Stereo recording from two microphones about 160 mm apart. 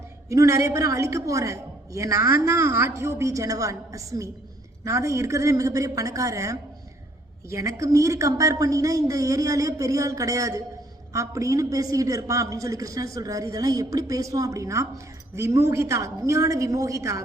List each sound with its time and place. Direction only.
0.3 s a woman's voice: 20° right (ahead or behind)